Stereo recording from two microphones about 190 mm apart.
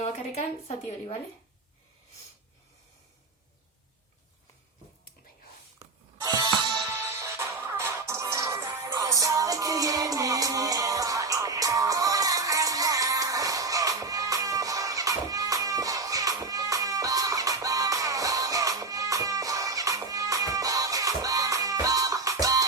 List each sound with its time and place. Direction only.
0.0 s speech: 35° left (ahead or behind)
6.1 s music: 25° right (ahead or behind)